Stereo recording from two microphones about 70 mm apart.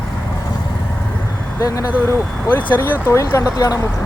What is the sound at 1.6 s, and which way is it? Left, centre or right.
Speech, left.